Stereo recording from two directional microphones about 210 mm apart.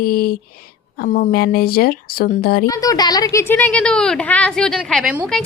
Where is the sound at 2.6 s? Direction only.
15° left (ahead or behind).